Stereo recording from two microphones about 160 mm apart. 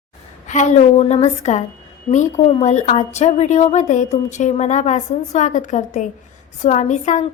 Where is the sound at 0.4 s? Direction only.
50° left (ahead or behind).